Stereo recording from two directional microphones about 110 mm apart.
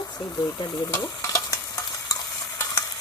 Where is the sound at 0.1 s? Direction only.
35° left (ahead or behind).